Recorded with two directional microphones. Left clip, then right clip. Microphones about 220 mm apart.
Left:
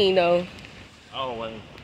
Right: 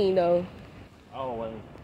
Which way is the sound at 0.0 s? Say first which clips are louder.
Left 3 dB; 25° left (ahead or behind).